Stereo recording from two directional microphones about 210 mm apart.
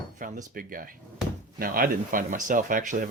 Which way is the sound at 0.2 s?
40° right (ahead or behind).